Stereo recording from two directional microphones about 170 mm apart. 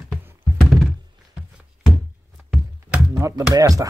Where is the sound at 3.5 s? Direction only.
20° right (ahead or behind).